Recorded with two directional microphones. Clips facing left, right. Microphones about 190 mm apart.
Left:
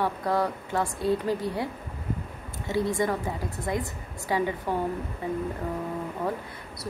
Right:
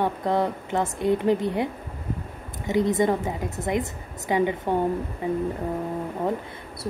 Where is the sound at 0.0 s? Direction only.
20° right (ahead or behind).